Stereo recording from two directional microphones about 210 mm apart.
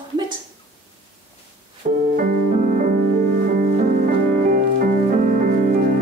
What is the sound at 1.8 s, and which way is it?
Music, 35° right (ahead or behind).